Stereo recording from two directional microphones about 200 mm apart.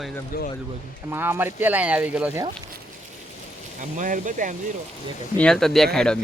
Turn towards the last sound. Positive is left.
turn(degrees=5)  # may be behind; listen again after turning